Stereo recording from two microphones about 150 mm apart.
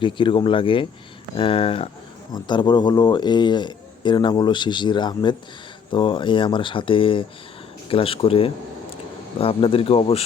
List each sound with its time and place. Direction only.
0.0 s a man's voice: 35° left (ahead or behind)